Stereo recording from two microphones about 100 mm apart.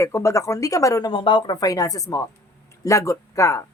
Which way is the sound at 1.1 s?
55° left (ahead or behind).